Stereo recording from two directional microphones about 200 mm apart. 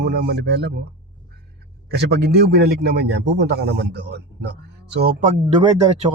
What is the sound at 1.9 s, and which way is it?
A man's voice, 55° right (ahead or behind).